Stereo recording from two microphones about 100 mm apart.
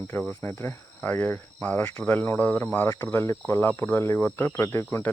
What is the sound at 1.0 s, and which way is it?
Cricket, 15° left (ahead or behind).